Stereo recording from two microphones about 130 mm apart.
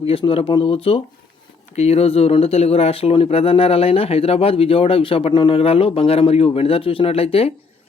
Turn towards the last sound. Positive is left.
turn(degrees=45)  # may be behind; listen again after turning